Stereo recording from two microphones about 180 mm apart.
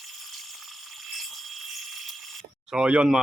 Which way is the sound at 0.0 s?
Centre (ahead or behind).